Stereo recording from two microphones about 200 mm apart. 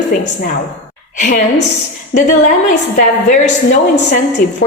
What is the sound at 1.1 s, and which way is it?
Speech, 40° left (ahead or behind).